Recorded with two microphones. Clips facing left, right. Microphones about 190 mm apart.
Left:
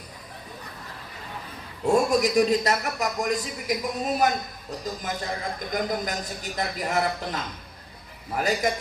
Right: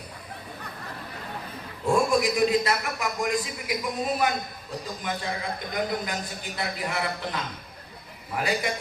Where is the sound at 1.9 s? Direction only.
40° left (ahead or behind).